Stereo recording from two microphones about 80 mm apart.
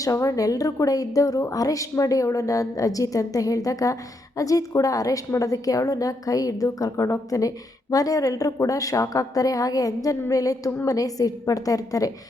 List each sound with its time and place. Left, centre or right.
0.0 s a woman's voice: left